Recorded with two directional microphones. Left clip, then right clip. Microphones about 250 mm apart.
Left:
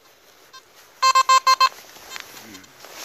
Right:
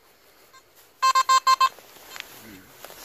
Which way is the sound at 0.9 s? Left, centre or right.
Left.